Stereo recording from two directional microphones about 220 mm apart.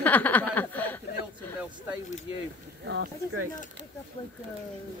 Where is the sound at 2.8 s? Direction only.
55° right (ahead or behind).